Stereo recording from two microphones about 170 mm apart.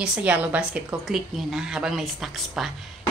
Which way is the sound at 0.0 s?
5° right (ahead or behind).